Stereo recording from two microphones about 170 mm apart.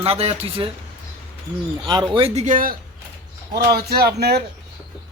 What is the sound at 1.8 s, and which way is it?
Speech, 25° right (ahead or behind).